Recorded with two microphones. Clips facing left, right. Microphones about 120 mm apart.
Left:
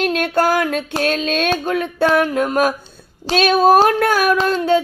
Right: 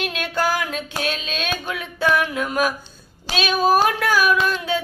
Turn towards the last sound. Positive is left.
turn(degrees=45)  # may be behind; listen again after turning